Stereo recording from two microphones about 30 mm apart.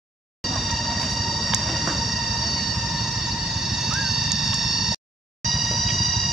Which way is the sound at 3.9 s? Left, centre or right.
Centre.